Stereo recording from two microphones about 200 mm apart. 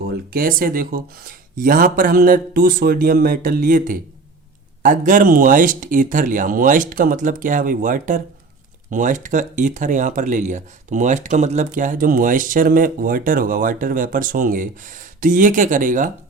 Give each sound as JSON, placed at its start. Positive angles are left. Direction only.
{"t": 0.3, "sound": "speech", "side_deg": -45}